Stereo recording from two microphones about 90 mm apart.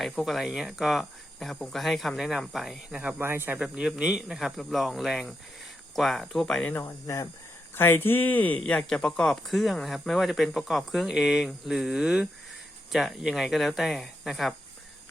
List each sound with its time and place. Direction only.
0.0 s speech: centre (ahead or behind)
3.2 s speech: 25° right (ahead or behind)
3.6 s speech: 5° right (ahead or behind)
6.7 s speech: 30° left (ahead or behind); by 14.5 s centre (ahead or behind)